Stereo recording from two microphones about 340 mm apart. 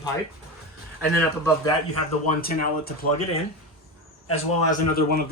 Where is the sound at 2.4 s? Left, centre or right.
Left.